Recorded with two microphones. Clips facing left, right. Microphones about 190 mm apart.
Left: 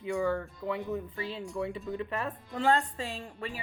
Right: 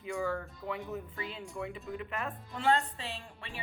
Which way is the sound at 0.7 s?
30° left (ahead or behind).